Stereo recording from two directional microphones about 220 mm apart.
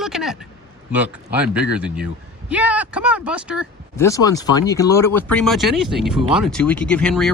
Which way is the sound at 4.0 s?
15° left (ahead or behind).